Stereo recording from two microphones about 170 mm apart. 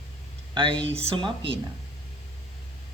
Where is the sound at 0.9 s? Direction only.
35° right (ahead or behind).